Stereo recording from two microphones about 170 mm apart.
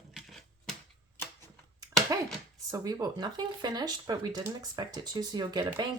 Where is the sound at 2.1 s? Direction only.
20° right (ahead or behind).